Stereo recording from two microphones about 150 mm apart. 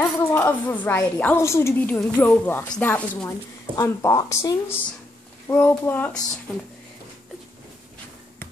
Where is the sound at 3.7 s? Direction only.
20° left (ahead or behind).